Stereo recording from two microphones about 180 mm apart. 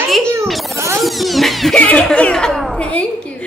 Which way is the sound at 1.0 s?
Centre (ahead or behind).